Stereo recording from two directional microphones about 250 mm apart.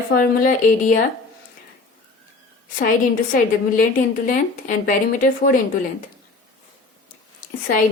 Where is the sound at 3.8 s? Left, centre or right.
Left.